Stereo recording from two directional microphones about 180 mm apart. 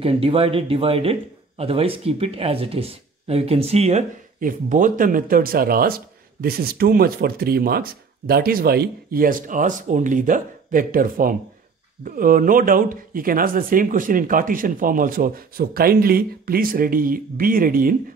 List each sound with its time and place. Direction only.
0.0 s speech: 30° right (ahead or behind); by 17.9 s 50° right (ahead or behind)